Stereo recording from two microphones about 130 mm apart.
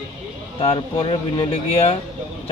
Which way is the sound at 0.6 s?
45° left (ahead or behind).